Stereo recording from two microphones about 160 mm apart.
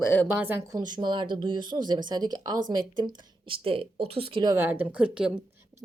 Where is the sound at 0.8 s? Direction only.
25° right (ahead or behind); by 5.1 s 10° right (ahead or behind).